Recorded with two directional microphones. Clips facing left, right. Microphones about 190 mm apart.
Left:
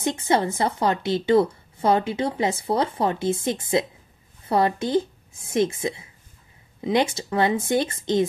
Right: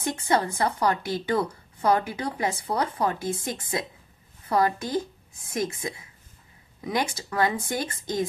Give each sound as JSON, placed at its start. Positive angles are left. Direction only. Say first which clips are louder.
{"t": 0.0, "sound": "a woman's voice", "louder": "left 3 dB", "side_deg": 25}